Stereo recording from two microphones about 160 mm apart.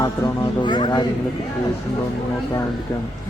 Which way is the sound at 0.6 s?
25° left (ahead or behind).